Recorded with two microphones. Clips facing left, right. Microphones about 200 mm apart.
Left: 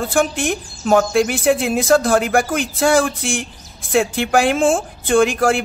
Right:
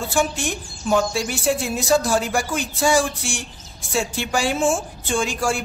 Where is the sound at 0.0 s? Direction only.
55° left (ahead or behind).